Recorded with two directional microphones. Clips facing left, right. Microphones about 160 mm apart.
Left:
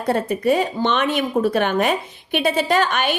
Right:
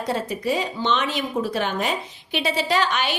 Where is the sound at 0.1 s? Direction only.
55° left (ahead or behind).